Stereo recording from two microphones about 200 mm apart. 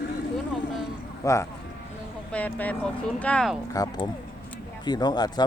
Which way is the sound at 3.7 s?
20° left (ahead or behind).